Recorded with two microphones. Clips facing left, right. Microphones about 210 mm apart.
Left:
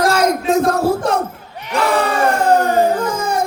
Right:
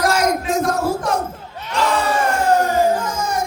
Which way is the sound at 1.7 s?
60° left (ahead or behind).